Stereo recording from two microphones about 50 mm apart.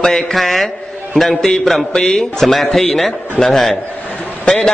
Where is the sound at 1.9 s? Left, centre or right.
Centre.